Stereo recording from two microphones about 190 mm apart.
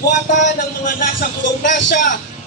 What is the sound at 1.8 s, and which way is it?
Speech, 70° left (ahead or behind).